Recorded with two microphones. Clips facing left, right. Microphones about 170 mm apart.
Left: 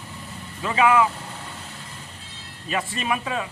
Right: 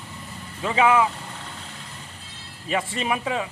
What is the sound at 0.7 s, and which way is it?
Speech, 25° right (ahead or behind).